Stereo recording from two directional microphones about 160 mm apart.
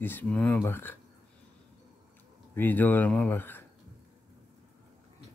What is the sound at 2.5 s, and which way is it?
Speech, 10° left (ahead or behind).